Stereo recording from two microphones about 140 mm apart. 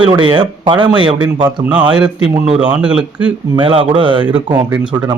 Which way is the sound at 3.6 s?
40° right (ahead or behind).